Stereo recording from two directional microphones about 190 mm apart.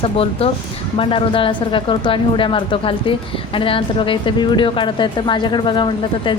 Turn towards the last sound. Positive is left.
turn(degrees=25)  # may be behind; listen again after turning